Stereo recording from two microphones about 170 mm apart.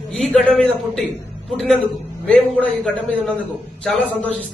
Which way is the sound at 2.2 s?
5° left (ahead or behind).